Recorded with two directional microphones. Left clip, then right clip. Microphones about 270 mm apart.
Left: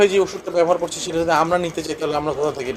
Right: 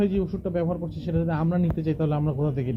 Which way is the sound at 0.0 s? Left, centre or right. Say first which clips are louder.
Left 10 dB; centre.